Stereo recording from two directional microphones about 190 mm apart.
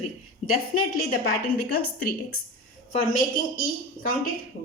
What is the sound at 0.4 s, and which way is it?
Speech, 35° left (ahead or behind).